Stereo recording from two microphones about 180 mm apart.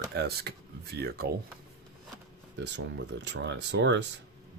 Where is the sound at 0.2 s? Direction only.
60° right (ahead or behind).